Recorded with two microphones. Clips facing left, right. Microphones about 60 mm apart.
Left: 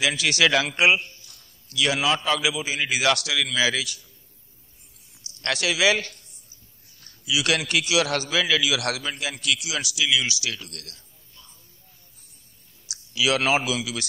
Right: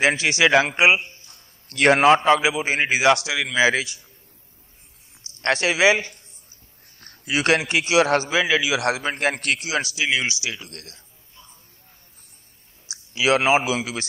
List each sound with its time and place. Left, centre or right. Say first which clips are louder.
0.0 s a man's voice: right 3 dB; right
1.7 s a man's voice: right 8 dB; right
3.0 s a man's voice: right 3 dB; right
5.2 s speech: right 5 dB; right
7.0 s a sound: right 3 dB; right
7.5 s a man's voice: right 5 dB; right
9.1 s a man's voice: right 5 dB; right
12.8 s speech: right 3 dB; right